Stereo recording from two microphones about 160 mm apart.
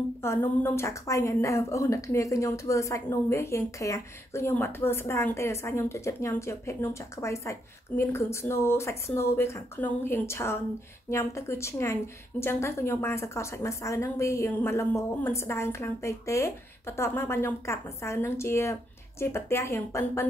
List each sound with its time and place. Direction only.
0.2 s a woman's voice: 15° left (ahead or behind)